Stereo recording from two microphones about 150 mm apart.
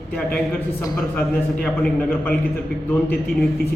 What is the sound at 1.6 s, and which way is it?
Speech, 10° left (ahead or behind).